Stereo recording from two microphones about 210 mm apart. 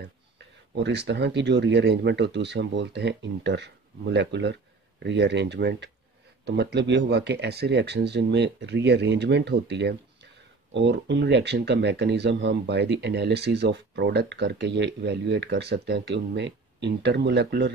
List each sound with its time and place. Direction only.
0.8 s speech: 55° right (ahead or behind)